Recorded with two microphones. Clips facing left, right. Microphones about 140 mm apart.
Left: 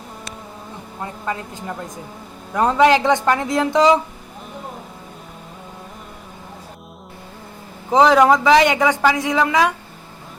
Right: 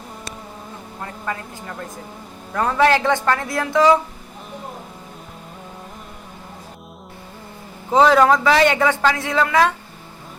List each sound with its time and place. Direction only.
1.0 s a woman's voice: 20° left (ahead or behind)
7.9 s speech: 15° left (ahead or behind)